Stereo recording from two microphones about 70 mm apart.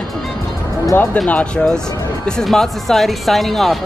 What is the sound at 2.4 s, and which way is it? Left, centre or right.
Speech, centre.